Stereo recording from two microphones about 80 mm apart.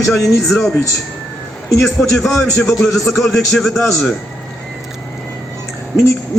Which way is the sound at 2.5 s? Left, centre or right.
Centre.